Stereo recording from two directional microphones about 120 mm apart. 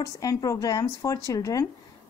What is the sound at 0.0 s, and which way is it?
Speech, 30° left (ahead or behind).